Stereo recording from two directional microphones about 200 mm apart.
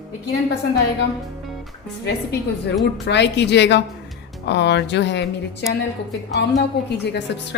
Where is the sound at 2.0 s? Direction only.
55° left (ahead or behind).